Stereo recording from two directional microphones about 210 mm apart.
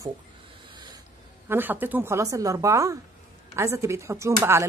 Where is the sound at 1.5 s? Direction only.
10° right (ahead or behind).